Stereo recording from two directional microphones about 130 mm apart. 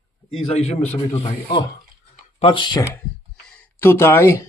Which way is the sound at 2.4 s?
40° left (ahead or behind).